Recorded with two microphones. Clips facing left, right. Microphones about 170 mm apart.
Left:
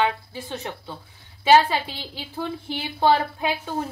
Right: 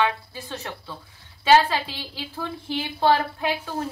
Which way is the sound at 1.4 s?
10° left (ahead or behind).